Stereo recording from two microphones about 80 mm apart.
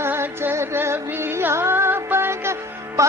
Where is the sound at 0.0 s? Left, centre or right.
Right.